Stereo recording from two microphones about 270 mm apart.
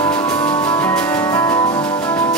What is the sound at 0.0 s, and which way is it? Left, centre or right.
Music, centre.